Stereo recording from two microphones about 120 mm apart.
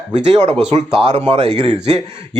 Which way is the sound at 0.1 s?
70° right (ahead or behind).